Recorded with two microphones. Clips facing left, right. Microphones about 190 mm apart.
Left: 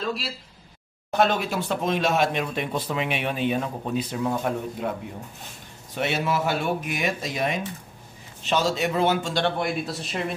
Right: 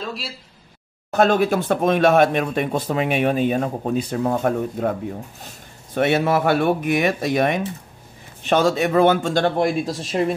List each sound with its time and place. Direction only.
0.0 s speech: centre (ahead or behind)
1.1 s speech: 50° right (ahead or behind)
5.9 s speech: 55° right (ahead or behind); by 10.3 s 35° right (ahead or behind)